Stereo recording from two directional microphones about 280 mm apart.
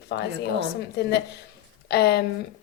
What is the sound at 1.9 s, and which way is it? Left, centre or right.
Speech, left.